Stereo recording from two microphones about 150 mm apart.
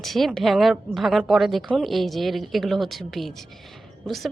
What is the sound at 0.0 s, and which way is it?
Speech, centre (ahead or behind).